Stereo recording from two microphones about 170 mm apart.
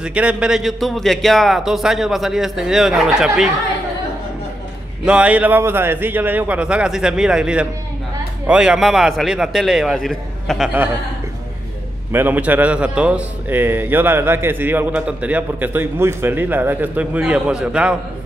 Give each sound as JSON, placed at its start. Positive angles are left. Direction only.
{"t": 0.0, "sound": "a man's voice", "side_deg": -5}
{"t": 5.0, "sound": "a man's voice", "side_deg": -5}
{"t": 12.1, "sound": "a man's voice", "side_deg": -10}